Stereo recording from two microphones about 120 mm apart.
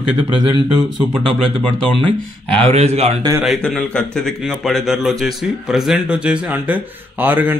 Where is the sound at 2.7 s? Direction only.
60° right (ahead or behind).